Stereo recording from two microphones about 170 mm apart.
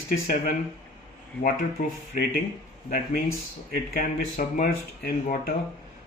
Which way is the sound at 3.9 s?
55° left (ahead or behind).